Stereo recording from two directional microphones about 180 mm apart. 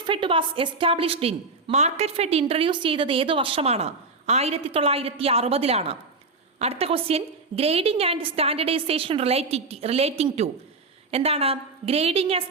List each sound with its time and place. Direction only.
0.0 s a woman's voice: 30° right (ahead or behind)